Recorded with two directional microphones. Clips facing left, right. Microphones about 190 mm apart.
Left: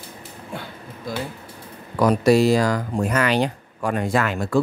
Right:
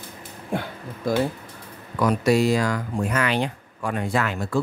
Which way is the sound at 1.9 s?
35° left (ahead or behind).